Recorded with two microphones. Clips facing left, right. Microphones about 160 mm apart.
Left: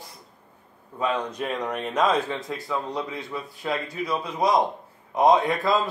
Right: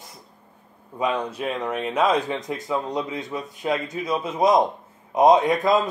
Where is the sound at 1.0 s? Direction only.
10° right (ahead or behind).